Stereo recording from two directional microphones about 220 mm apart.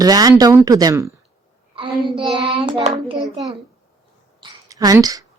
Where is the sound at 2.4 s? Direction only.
20° right (ahead or behind).